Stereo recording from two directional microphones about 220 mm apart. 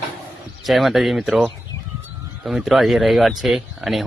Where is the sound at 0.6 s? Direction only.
Centre (ahead or behind).